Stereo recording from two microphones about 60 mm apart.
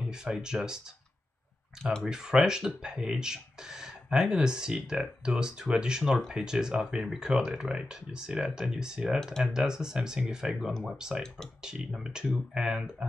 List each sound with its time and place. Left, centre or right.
0.1 s speech: centre
2.0 s speech: centre